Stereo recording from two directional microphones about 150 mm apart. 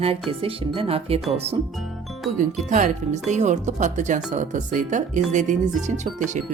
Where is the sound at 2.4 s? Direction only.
55° right (ahead or behind).